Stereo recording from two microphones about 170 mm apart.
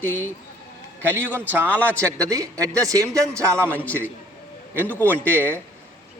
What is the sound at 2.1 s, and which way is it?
A man's voice, 20° right (ahead or behind).